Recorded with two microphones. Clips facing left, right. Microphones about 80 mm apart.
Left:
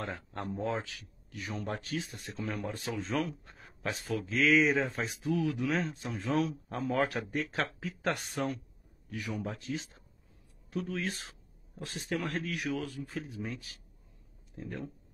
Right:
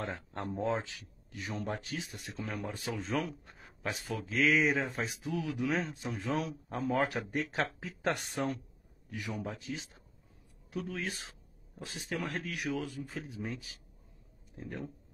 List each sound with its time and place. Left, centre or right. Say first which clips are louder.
0.1 s speech: even; right
9.5 s speech: left 3 dB; centre
12.4 s speech: left 1 dB; centre
14.6 s speech: left 1 dB; centre